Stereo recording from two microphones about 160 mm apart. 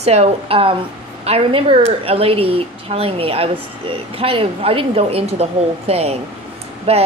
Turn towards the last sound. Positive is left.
turn(degrees=-40)  # may be behind; listen again after turning